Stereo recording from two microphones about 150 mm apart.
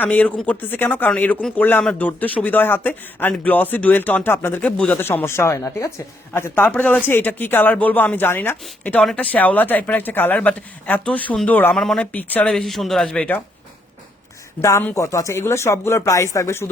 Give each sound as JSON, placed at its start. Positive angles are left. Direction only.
{"t": 0.0, "sound": "speech", "side_deg": 10}
{"t": 14.6, "sound": "speech", "side_deg": 20}